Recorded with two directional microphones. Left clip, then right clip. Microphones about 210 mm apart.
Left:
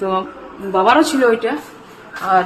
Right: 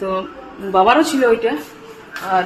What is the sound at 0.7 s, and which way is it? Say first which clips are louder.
Speech: even; 15° left (ahead or behind).